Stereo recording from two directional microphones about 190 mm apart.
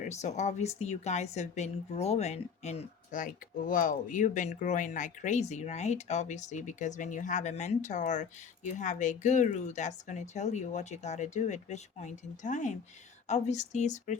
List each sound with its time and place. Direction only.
0.0 s a woman's voice: 35° left (ahead or behind)